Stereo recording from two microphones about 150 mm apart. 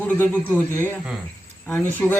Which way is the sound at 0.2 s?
15° left (ahead or behind).